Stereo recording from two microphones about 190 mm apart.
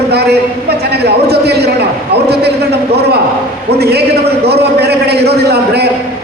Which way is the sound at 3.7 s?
60° right (ahead or behind).